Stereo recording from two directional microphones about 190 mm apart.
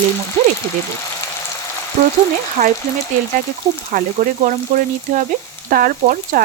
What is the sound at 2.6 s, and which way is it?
Speech, 35° right (ahead or behind).